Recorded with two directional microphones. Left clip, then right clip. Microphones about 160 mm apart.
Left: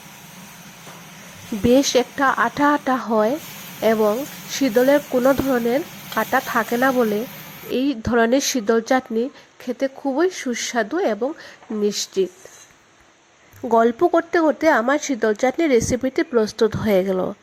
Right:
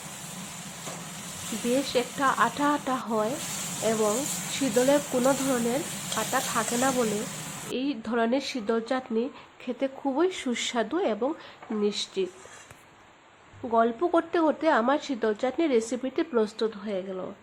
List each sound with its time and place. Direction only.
1.9 s speech: 40° left (ahead or behind)
9.8 s speech: 20° left (ahead or behind)
13.7 s speech: 40° left (ahead or behind)
14.1 s speech: 20° left (ahead or behind)
16.6 s a woman's voice: 50° left (ahead or behind)